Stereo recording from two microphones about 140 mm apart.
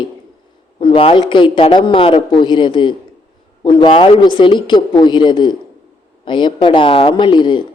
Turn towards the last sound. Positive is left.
turn(degrees=35)  # may be behind; listen again after turning